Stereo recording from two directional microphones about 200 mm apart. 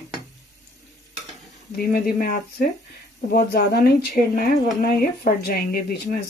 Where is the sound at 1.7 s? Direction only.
50° left (ahead or behind).